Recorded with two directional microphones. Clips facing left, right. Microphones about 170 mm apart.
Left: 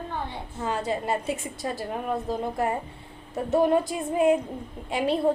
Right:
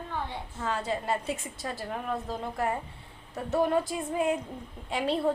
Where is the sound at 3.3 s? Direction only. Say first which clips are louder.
Left 5 dB; 20° left (ahead or behind).